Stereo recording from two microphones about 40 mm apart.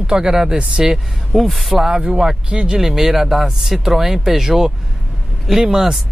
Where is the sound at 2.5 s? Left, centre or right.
Right.